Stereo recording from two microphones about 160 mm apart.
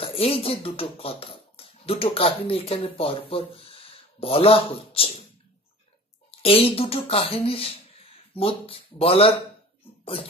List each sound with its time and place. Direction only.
0.0 s speech: 35° left (ahead or behind)
6.4 s speech: 35° left (ahead or behind)